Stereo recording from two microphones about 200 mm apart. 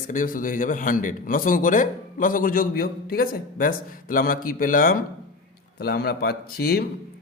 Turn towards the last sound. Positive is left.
turn(degrees=50)  # may be behind; listen again after turning